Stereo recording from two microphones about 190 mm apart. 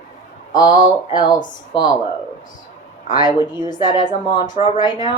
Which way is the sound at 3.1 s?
20° left (ahead or behind).